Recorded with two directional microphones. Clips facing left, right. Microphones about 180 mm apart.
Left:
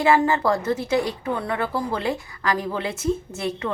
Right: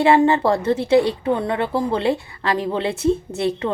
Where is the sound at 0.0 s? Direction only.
30° right (ahead or behind).